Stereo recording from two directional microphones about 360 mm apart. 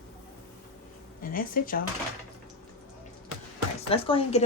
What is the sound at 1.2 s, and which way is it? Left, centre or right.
Speech, left.